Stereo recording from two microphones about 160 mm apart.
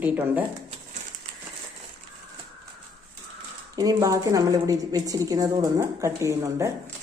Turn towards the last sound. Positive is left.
turn(degrees=-20)  # may be behind; listen again after turning